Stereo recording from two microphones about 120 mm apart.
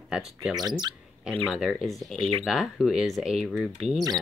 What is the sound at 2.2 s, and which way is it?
Speech, 55° right (ahead or behind).